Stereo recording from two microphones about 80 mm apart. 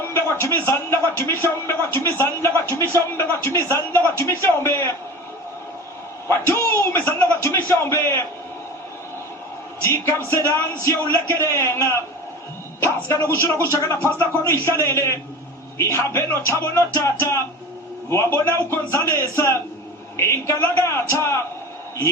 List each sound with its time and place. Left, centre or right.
0.1 s a man's voice: left
6.2 s a man's voice: left
9.8 s a man's voice: left